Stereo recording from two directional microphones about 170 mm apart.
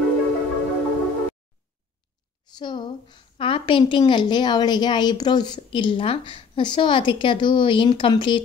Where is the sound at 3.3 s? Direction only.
30° left (ahead or behind).